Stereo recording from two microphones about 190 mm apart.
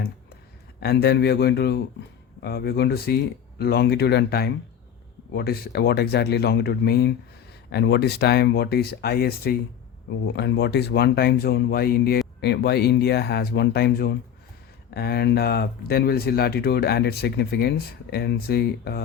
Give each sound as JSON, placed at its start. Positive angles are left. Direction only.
{"t": 0.8, "sound": "speech", "side_deg": 55}
{"t": 10.3, "sound": "speech", "side_deg": 65}